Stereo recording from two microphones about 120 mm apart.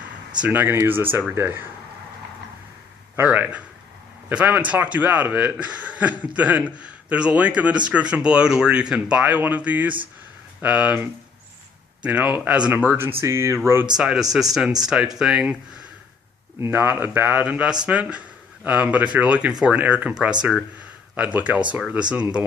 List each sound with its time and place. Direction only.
0.4 s a man's voice: 15° right (ahead or behind)
3.2 s a man's voice: 15° right (ahead or behind)
13.9 s a man's voice: 5° right (ahead or behind)
16.6 s a man's voice: 20° right (ahead or behind)